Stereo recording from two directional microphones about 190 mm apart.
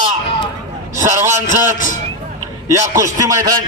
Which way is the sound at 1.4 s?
45° left (ahead or behind).